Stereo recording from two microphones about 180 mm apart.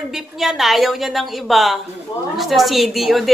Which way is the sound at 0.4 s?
Centre (ahead or behind).